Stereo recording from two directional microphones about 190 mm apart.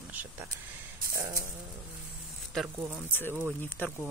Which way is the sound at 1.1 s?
15° right (ahead or behind).